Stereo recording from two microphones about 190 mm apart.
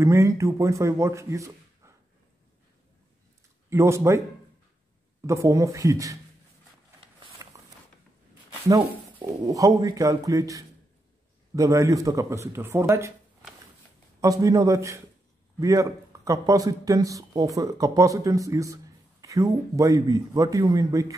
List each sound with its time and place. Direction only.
0.0 s speech: 15° right (ahead or behind)
3.7 s speech: 15° right (ahead or behind)
5.2 s speech: 15° right (ahead or behind)
7.4 s walk: 20° right (ahead or behind)
8.6 s speech: 15° right (ahead or behind)
14.2 s speech: 20° right (ahead or behind)